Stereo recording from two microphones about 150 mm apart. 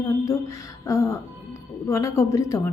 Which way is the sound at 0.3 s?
20° left (ahead or behind).